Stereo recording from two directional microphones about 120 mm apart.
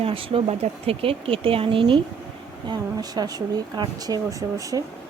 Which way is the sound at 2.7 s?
35° right (ahead or behind).